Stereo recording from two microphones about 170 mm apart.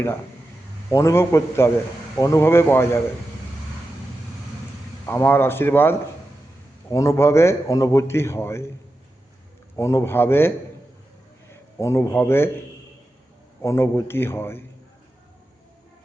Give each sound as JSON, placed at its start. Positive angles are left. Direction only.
{"t": 0.9, "sound": "a man's voice", "side_deg": 15}
{"t": 5.0, "sound": "a man's voice", "side_deg": 10}
{"t": 9.7, "sound": "a man's voice", "side_deg": 15}
{"t": 13.6, "sound": "a man's voice", "side_deg": 15}